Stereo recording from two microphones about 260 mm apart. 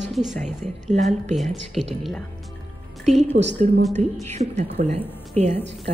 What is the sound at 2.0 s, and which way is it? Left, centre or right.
Music, centre.